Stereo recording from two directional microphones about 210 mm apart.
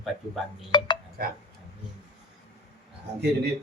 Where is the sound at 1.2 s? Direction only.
45° right (ahead or behind).